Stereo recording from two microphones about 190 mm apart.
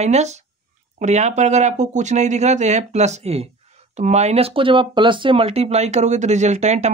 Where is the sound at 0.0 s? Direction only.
35° right (ahead or behind).